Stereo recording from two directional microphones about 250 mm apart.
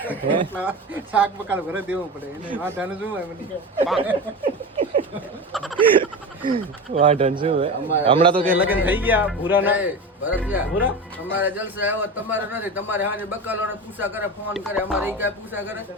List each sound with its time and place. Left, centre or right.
0.1 s speech: centre
4.4 s a sound: right
6.0 s a man's voice: centre
8.5 s speech: centre